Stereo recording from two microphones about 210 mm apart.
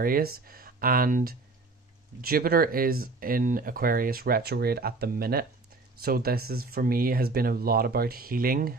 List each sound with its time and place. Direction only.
0.0 s speech: 45° right (ahead or behind)